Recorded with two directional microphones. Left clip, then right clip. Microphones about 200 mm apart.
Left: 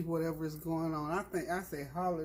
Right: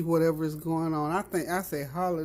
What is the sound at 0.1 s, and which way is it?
Speech, 50° right (ahead or behind).